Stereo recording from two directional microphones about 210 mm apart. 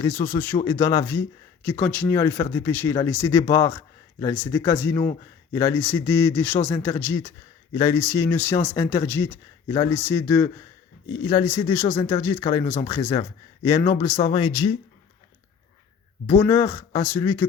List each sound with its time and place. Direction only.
0.0 s speech: 10° left (ahead or behind)
16.2 s speech: 10° left (ahead or behind)